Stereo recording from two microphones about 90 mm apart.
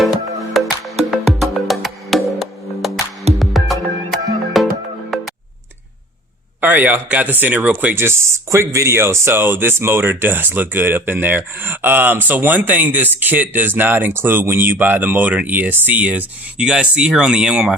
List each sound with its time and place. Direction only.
1.1 s music: centre (ahead or behind)
6.6 s speech: 20° right (ahead or behind)